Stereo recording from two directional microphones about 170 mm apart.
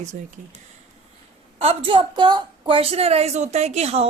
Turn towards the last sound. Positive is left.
turn(degrees=-40)  # may be behind; listen again after turning